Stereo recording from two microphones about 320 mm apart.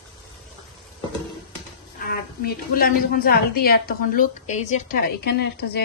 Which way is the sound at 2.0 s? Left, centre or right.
Left.